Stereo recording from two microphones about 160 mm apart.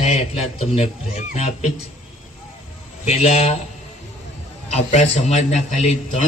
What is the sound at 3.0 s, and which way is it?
Speech, 45° left (ahead or behind).